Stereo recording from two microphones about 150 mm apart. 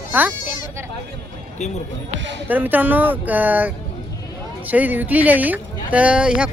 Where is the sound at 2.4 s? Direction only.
10° right (ahead or behind).